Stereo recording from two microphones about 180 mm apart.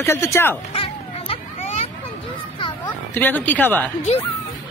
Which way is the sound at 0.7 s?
30° left (ahead or behind).